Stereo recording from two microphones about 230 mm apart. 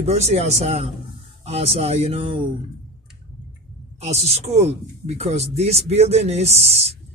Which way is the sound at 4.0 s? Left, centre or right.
Right.